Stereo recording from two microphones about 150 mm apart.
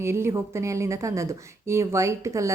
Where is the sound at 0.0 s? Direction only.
15° right (ahead or behind).